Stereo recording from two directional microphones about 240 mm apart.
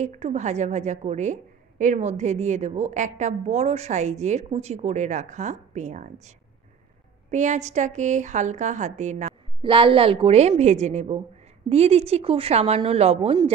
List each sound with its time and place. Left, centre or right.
0.0 s a woman's voice: right
7.2 s a woman's voice: right